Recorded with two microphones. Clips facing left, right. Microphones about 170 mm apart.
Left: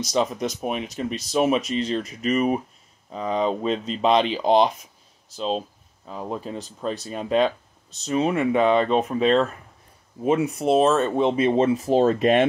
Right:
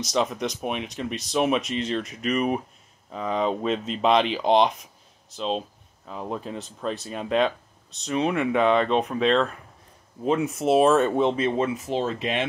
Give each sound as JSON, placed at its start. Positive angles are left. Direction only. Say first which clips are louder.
{"t": 0.0, "sound": "speech", "louder": "left 2 dB", "side_deg": 0}
{"t": 11.5, "sound": "speech", "louder": "left 6 dB", "side_deg": 30}